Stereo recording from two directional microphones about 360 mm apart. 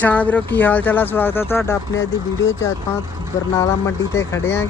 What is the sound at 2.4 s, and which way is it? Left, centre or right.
Speech, left.